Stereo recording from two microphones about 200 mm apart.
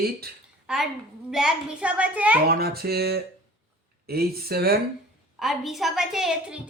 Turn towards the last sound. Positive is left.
turn(degrees=0)  # may be behind; listen again after turning